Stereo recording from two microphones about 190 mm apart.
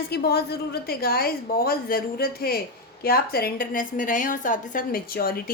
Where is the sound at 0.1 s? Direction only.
55° left (ahead or behind).